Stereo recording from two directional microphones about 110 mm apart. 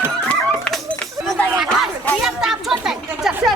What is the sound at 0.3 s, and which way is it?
Dog, 10° left (ahead or behind).